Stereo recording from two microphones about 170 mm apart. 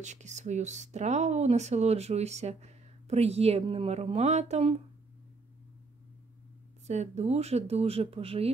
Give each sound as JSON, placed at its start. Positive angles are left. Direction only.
{"t": 0.0, "sound": "speech", "side_deg": -45}
{"t": 6.9, "sound": "speech", "side_deg": -40}